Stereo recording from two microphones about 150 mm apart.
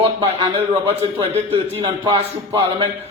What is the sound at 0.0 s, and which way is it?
A man's voice, 35° right (ahead or behind).